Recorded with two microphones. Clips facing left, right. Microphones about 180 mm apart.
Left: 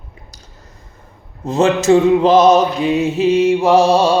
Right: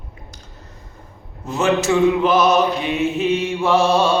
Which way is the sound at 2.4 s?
20° left (ahead or behind).